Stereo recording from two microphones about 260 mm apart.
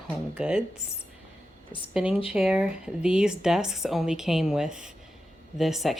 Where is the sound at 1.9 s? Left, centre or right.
Centre.